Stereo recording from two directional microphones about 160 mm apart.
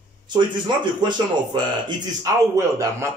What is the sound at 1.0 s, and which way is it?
Speech, 30° right (ahead or behind).